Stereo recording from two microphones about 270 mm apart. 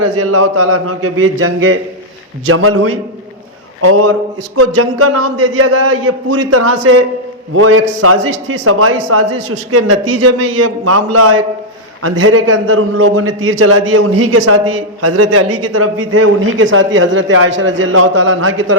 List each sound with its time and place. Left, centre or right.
0.0 s a man's voice: right